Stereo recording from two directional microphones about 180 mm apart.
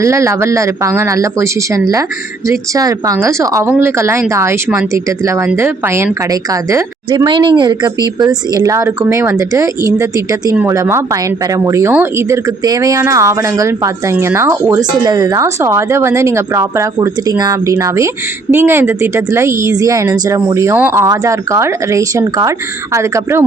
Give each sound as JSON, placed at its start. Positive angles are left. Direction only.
{"t": 0.0, "sound": "speech", "side_deg": -15}